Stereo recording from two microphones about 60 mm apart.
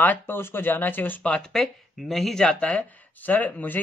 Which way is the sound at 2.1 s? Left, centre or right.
Centre.